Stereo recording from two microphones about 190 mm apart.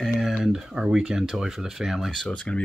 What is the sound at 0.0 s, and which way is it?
Speech, centre (ahead or behind).